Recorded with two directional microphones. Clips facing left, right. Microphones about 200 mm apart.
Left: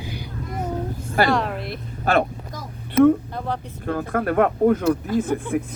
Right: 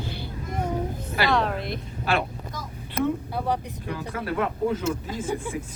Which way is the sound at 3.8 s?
50° left (ahead or behind).